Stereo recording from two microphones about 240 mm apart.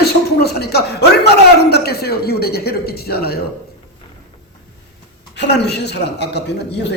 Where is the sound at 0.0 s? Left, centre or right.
Left.